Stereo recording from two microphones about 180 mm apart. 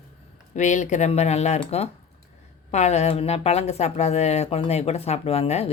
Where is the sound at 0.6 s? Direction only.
40° left (ahead or behind).